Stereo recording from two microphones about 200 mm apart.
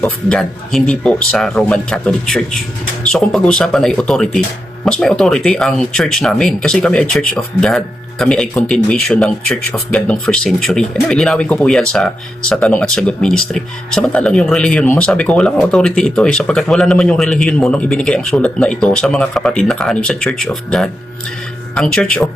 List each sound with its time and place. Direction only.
0.0 s speech: 5° left (ahead or behind)